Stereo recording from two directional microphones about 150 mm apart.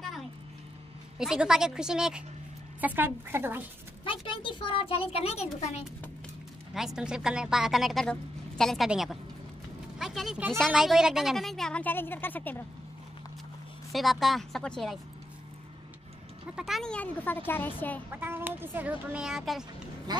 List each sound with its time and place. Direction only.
1.1 s a woman's voice: 5° right (ahead or behind)
4.0 s a child's voice: 35° left (ahead or behind)
6.7 s a woman's voice: 5° right (ahead or behind)
13.9 s a woman's voice: centre (ahead or behind)
16.5 s speech: centre (ahead or behind)
18.1 s speech: 15° right (ahead or behind)
20.1 s quack: 25° right (ahead or behind)